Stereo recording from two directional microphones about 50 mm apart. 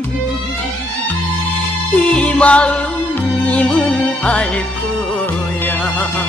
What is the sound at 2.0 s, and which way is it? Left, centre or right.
Music, left.